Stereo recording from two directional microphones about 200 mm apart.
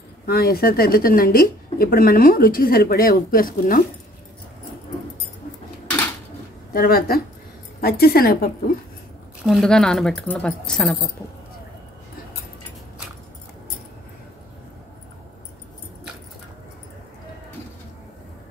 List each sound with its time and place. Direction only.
0.3 s speech: 50° left (ahead or behind)
6.7 s speech: 45° left (ahead or behind)
9.4 s a woman's voice: centre (ahead or behind)